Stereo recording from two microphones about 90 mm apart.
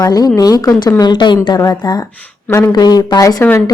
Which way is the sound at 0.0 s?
45° left (ahead or behind).